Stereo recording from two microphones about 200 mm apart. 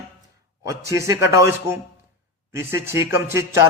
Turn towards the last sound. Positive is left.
turn(degrees=-15)  # may be behind; listen again after turning